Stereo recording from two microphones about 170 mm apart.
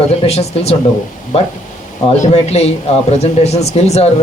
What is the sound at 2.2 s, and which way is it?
A man's voice, 40° left (ahead or behind).